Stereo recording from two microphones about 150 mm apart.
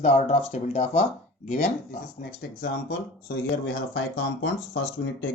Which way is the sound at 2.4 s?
80° left.